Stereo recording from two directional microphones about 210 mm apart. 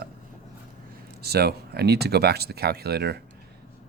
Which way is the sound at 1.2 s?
50° right (ahead or behind).